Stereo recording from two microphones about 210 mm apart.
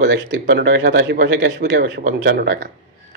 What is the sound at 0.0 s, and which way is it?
Speech, 55° right (ahead or behind).